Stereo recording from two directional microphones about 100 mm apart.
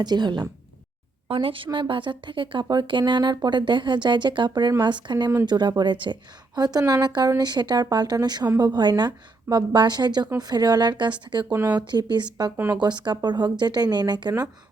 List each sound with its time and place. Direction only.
0.0 s speech: 45° right (ahead or behind)
1.3 s speech: 65° right (ahead or behind); by 14.5 s 40° right (ahead or behind)